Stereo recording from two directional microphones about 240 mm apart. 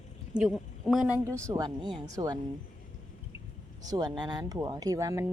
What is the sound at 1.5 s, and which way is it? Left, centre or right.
Speech, centre.